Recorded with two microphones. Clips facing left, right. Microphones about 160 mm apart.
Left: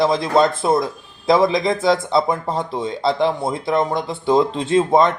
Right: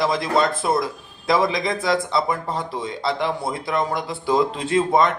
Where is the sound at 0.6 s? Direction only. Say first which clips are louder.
Left 4 dB; 25° left (ahead or behind).